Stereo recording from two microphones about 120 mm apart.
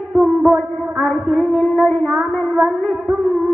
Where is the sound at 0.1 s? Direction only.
Centre (ahead or behind).